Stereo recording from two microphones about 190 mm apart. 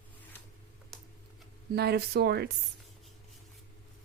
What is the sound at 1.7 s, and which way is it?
Speech, 60° right (ahead or behind).